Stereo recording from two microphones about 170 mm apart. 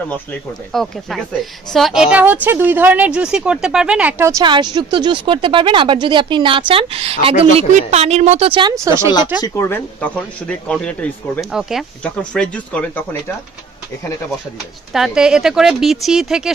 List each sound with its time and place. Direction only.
0.1 s speech: 5° left (ahead or behind); by 8.7 s 30° right (ahead or behind)
8.8 s speech: 15° right (ahead or behind)
9.4 s speech: 20° left (ahead or behind)
14.9 s speech: 5° right (ahead or behind)